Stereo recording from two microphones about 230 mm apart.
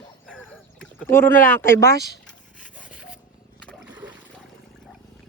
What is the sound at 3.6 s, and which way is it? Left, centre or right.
Splash, centre.